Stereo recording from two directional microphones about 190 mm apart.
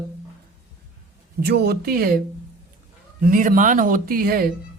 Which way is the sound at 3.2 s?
45° right (ahead or behind).